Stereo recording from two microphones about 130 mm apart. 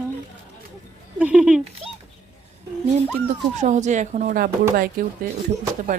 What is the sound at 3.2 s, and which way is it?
Speech, 70° right (ahead or behind).